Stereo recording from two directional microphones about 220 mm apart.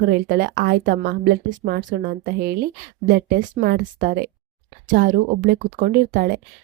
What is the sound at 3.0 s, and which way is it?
Speech, 40° right (ahead or behind).